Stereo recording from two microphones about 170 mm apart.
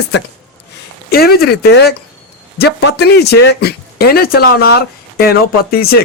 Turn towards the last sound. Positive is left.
turn(degrees=65)  # may be behind; listen again after turning